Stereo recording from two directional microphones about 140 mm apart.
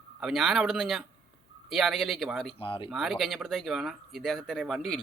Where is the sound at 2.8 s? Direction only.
Centre (ahead or behind).